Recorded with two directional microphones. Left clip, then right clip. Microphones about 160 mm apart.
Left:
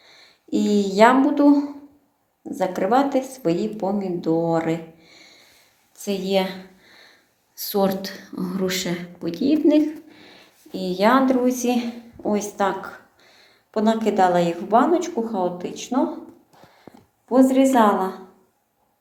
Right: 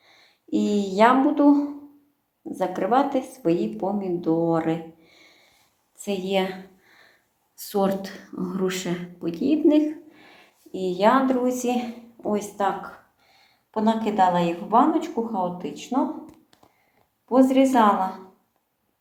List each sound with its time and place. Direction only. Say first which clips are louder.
0.0 s a woman's voice: left 5 dB; 5° left (ahead or behind)
7.5 s speech: left 2 dB; 5° left (ahead or behind)
10.7 s a woman's voice: left 1 dB; 20° left (ahead or behind)
17.2 s a woman's voice: left 2 dB; 15° left (ahead or behind)